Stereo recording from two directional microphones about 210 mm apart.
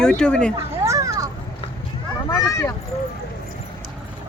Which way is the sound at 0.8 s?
15° right (ahead or behind).